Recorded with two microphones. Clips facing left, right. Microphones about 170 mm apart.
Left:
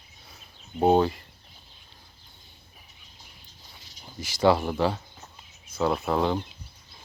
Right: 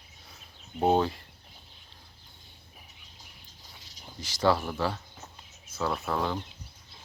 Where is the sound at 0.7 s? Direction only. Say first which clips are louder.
Left 4 dB; 5° left (ahead or behind).